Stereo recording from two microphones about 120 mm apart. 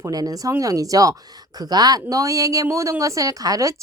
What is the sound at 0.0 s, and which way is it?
Speech, 30° right (ahead or behind).